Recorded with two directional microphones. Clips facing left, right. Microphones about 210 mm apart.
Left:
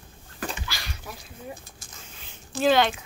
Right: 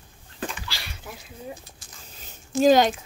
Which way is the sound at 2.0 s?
40° right (ahead or behind).